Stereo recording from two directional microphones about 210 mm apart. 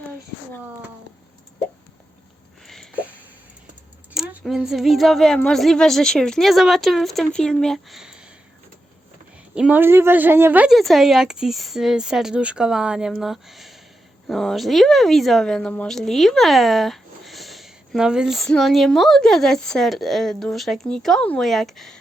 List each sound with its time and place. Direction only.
2.6 s a sound: 5° right (ahead or behind)
4.1 s speech: centre (ahead or behind)
9.6 s speech: 5° right (ahead or behind)